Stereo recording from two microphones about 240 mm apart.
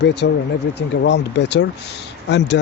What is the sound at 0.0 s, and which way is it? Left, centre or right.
Speech, left.